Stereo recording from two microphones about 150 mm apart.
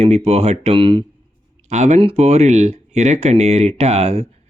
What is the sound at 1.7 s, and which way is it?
Speech, 50° right (ahead or behind).